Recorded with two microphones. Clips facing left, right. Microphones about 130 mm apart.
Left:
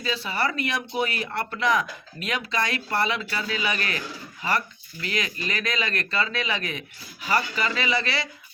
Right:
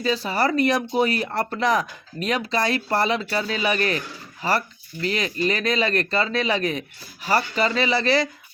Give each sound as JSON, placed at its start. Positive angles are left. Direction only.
{"t": 0.0, "sound": "speech", "side_deg": -40}